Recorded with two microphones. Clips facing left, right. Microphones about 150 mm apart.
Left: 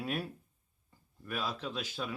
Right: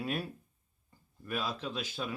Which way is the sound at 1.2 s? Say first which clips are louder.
Right 1 dB; centre (ahead or behind).